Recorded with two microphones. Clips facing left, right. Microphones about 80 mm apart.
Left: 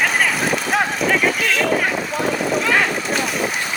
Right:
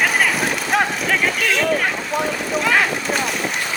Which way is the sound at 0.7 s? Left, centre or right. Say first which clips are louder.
Right 1 dB; centre.